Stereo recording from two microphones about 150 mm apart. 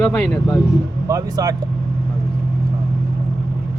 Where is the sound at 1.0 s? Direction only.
25° right (ahead or behind).